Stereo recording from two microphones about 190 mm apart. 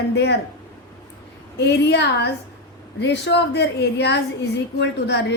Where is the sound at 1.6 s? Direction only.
65° left (ahead or behind).